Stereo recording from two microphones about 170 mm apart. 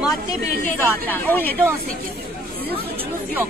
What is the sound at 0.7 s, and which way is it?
Speech, 10° left (ahead or behind).